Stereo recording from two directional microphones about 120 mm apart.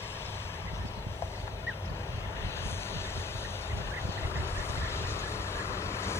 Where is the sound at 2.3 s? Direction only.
25° left (ahead or behind).